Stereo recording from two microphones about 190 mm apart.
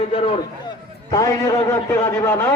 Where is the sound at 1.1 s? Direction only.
15° left (ahead or behind).